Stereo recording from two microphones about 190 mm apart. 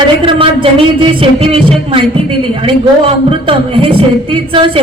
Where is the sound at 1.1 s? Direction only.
30° right (ahead or behind).